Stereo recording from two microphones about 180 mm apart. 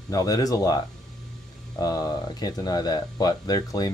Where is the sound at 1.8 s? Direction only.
20° left (ahead or behind).